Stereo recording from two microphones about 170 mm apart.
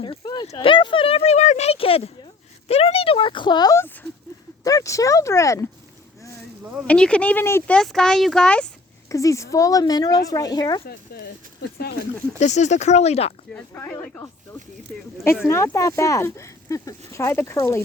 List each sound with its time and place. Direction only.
0.0 s a sound: 25° left (ahead or behind)
0.4 s speech: 30° left (ahead or behind)
6.8 s speech: 5° left (ahead or behind)
9.0 s speech: 20° left (ahead or behind)
10.8 s speech: 65° left (ahead or behind)
12.4 s speech: 45° left (ahead or behind)
13.5 s speech: 15° left (ahead or behind)